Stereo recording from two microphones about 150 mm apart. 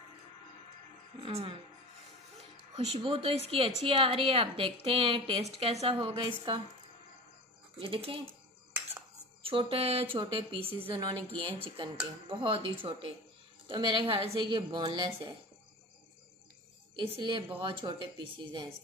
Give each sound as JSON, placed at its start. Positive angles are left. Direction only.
{"t": 1.2, "sound": "a woman's voice", "side_deg": -35}
{"t": 3.0, "sound": "a woman's voice", "side_deg": -35}
{"t": 7.8, "sound": "a woman's voice", "side_deg": -35}
{"t": 9.4, "sound": "a woman's voice", "side_deg": -35}
{"t": 17.0, "sound": "a woman's voice", "side_deg": -35}